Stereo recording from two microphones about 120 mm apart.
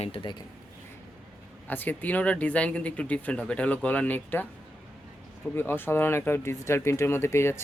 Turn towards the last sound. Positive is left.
turn(degrees=20)  # may be behind; listen again after turning